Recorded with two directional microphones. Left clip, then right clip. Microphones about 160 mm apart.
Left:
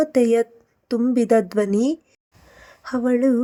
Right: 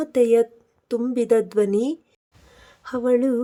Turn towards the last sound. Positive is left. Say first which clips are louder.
# even
turn(degrees=15)  # may be behind; listen again after turning